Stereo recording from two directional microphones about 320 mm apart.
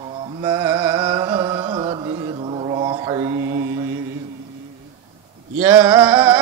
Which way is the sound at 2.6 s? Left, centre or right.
Centre.